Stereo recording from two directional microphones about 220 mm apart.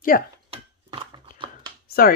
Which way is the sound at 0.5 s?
25° right (ahead or behind).